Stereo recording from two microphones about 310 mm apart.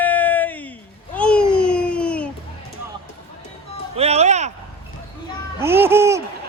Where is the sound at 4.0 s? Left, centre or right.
Centre.